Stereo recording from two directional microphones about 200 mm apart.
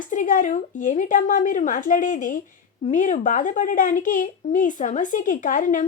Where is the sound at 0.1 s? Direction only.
40° left (ahead or behind).